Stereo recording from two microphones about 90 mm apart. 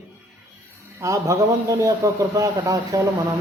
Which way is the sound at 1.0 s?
35° right (ahead or behind).